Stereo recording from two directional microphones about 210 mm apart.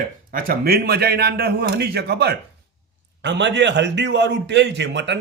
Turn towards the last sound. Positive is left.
turn(degrees=-55)  # may be behind; listen again after turning